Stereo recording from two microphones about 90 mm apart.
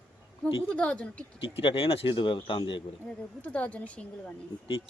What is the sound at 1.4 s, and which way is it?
A man's voice, 75° left (ahead or behind).